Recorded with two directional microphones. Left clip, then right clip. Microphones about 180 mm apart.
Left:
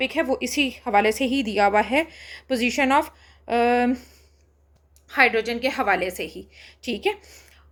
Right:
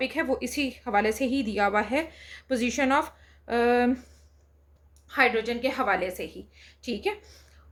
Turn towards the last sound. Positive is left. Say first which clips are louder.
# left 5 dB
turn(degrees=45)  # may be behind; listen again after turning